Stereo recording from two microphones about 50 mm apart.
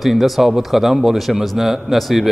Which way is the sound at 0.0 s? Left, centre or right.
Centre.